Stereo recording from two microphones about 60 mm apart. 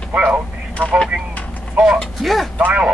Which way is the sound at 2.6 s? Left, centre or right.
Right.